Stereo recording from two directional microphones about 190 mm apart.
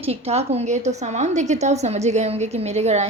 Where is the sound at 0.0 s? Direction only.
35° right (ahead or behind).